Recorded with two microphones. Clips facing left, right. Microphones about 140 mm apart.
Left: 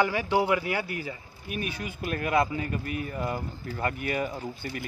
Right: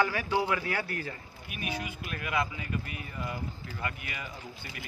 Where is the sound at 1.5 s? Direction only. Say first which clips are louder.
Left 3 dB; 45° left (ahead or behind).